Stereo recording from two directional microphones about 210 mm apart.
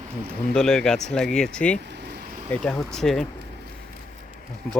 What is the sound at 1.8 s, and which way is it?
Vehicle, 55° right (ahead or behind).